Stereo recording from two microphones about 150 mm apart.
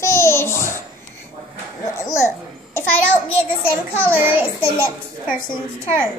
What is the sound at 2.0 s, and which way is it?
Speech, 20° left (ahead or behind).